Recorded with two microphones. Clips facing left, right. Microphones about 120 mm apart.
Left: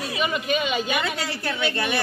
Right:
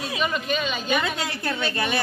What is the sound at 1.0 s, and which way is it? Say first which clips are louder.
Speech: even; 20° right (ahead or behind).